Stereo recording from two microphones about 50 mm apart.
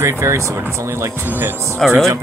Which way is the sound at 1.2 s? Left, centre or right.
Right.